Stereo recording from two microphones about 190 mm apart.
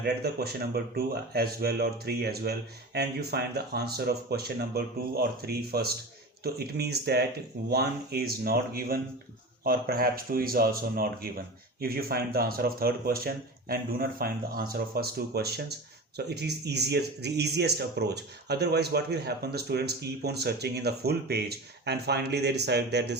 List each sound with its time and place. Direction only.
0.0 s speech: 55° right (ahead or behind)